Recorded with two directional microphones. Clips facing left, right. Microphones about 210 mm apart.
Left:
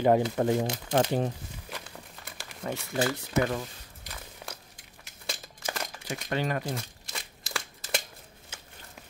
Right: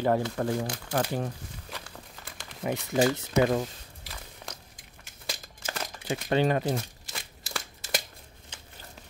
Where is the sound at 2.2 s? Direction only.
10° left (ahead or behind).